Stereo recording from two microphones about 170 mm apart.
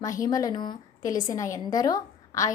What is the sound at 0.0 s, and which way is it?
A woman's voice, 20° left (ahead or behind).